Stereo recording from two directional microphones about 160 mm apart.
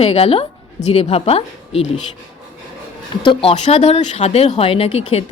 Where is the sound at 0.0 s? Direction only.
40° left (ahead or behind).